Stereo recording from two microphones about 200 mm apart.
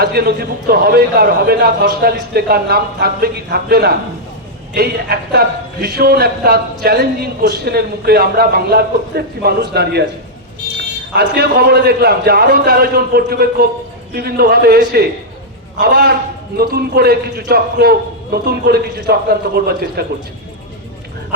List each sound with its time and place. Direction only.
0.0 s speech: 50° right (ahead or behind)
11.1 s speech: 55° right (ahead or behind)